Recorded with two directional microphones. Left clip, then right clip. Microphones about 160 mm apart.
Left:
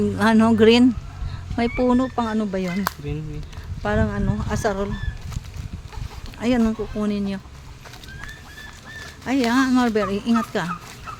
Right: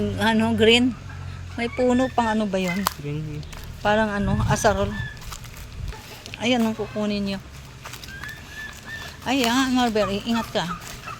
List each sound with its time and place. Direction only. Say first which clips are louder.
0.2 s speech: left 3 dB; 45° left (ahead or behind)
2.0 s speech: right 2 dB; 25° left (ahead or behind)
3.8 s speech: right 3 dB; 20° left (ahead or behind)
6.3 s speech: left 1 dB; 35° left (ahead or behind)
9.2 s speech: left 1 dB; 35° left (ahead or behind); by 10.7 s 55° left (ahead or behind)